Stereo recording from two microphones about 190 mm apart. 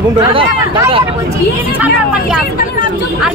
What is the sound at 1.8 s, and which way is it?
Speech, 5° right (ahead or behind).